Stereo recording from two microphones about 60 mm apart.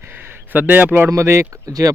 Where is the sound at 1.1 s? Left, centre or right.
Right.